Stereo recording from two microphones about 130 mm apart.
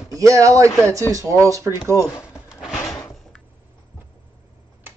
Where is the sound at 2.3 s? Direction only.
5° right (ahead or behind).